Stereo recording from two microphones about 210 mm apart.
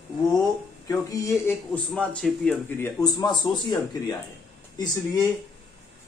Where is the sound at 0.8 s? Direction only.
15° left (ahead or behind).